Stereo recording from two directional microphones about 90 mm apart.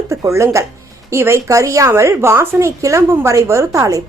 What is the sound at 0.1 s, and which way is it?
Speech, 35° right (ahead or behind).